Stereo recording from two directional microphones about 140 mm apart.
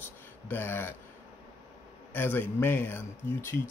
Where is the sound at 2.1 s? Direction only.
15° left (ahead or behind).